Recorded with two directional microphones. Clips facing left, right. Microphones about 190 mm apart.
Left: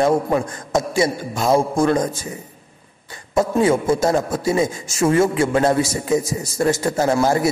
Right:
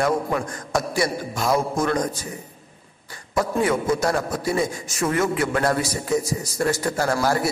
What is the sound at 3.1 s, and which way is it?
A man's voice, 25° left (ahead or behind).